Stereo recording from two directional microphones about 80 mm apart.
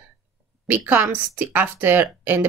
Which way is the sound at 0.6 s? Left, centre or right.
Right.